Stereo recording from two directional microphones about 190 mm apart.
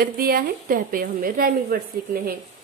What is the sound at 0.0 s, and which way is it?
A woman's voice, 50° right (ahead or behind).